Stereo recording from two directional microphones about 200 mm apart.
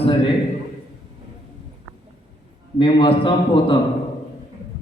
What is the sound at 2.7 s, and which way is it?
A man's voice, 25° left (ahead or behind).